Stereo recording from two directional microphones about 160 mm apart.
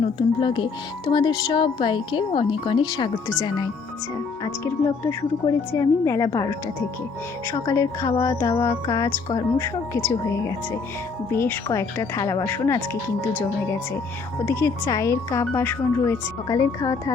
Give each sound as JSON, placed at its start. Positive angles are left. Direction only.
{"t": 0.2, "sound": "speech", "side_deg": 30}
{"t": 4.4, "sound": "speech", "side_deg": 20}
{"t": 14.4, "sound": "speech", "side_deg": 20}